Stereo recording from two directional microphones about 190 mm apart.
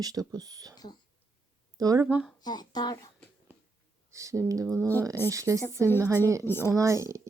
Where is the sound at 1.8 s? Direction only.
20° right (ahead or behind).